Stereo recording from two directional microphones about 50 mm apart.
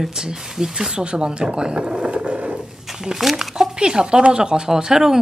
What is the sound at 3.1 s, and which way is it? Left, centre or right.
Speech, centre.